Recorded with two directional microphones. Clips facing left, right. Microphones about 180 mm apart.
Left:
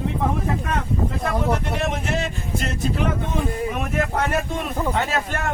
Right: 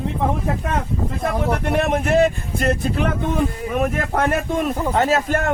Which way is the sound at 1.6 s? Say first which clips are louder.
Right 6 dB; 55° right (ahead or behind).